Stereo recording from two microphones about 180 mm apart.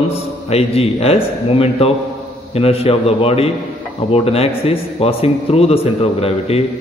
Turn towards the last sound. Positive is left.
turn(degrees=35)  # may be behind; listen again after turning